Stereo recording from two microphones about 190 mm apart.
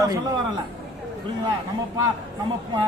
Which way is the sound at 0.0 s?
20° right (ahead or behind).